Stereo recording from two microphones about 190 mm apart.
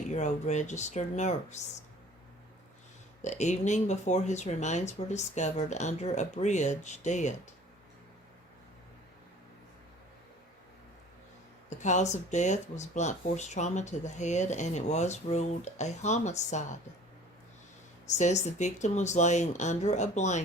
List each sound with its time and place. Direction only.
0.1 s speech: 40° left (ahead or behind)
3.2 s speech: 40° left (ahead or behind)
11.8 s speech: 40° left (ahead or behind)
18.0 s speech: 40° left (ahead or behind)